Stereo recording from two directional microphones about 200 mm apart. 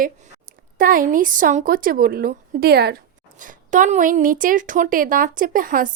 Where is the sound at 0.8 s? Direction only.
45° right (ahead or behind).